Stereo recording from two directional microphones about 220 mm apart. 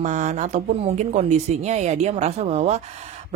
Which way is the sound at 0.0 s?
35° right (ahead or behind).